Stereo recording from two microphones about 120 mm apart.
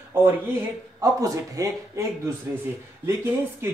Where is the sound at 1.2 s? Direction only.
30° right (ahead or behind).